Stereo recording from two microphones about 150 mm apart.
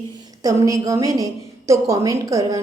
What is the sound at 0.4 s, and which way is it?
A woman's voice, 20° right (ahead or behind).